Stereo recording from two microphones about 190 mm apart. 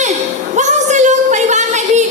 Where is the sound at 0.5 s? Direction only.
40° right (ahead or behind).